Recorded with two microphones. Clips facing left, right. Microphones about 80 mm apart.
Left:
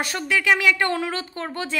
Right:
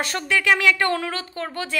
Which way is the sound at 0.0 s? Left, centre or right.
Centre.